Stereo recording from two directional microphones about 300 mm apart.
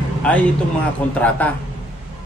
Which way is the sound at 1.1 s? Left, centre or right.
Centre.